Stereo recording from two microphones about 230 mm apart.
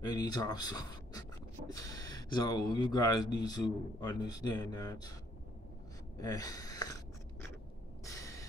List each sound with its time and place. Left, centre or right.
0.0 s speech: centre
6.1 s speech: centre
8.0 s a sound: centre